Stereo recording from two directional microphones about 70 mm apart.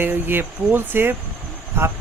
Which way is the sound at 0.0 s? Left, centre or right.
Right.